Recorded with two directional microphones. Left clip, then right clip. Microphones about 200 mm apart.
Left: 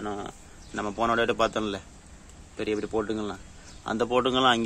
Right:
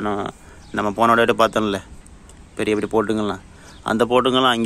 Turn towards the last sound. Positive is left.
turn(degrees=-10)  # may be behind; listen again after turning